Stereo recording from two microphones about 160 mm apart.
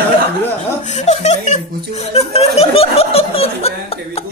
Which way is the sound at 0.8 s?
45° left (ahead or behind).